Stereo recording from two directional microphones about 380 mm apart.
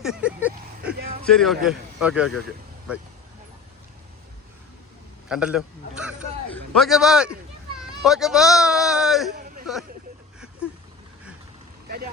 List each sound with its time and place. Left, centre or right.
0.0 s vehicle: centre
1.2 s a man's voice: centre
5.3 s speech: centre
6.0 s a sound: centre
6.7 s speech: centre
9.3 s hubbub: right